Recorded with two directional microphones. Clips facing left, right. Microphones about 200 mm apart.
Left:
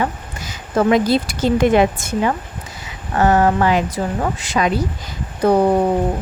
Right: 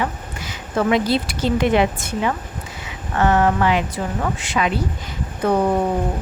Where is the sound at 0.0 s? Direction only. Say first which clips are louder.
Left 2 dB; 40° left (ahead or behind).